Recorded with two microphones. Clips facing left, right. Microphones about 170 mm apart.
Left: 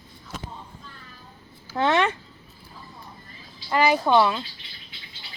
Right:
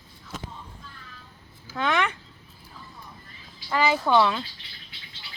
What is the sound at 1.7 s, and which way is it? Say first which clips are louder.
Speech: left 4 dB; 25° left (ahead or behind).